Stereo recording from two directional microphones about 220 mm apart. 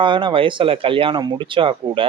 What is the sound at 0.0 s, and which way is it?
A man's voice, 20° right (ahead or behind).